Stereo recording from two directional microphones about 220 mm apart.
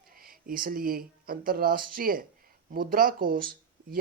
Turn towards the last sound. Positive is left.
turn(degrees=-40)  # may be behind; listen again after turning